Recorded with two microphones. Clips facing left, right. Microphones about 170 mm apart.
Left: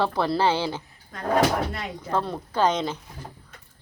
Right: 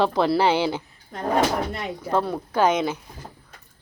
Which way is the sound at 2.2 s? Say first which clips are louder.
Right 1 dB; 5° right (ahead or behind).